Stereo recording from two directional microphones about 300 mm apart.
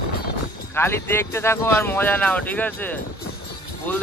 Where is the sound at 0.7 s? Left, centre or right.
Centre.